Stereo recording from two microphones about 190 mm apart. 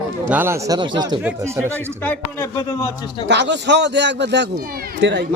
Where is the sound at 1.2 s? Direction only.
10° right (ahead or behind).